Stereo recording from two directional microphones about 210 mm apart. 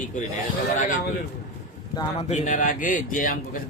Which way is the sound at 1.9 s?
25° left (ahead or behind).